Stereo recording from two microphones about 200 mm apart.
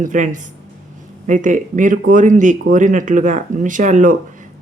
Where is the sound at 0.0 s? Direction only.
40° right (ahead or behind).